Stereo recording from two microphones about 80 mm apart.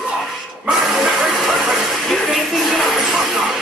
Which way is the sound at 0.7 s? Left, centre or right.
Centre.